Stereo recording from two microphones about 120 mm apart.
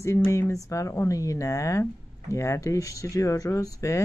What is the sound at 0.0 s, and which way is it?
Speech, 25° left (ahead or behind).